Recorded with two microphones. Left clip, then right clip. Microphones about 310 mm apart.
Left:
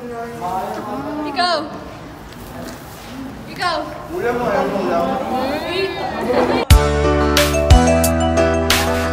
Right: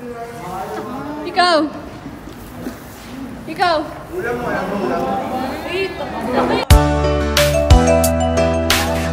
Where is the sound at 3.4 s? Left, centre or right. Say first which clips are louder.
Right 4 dB; centre.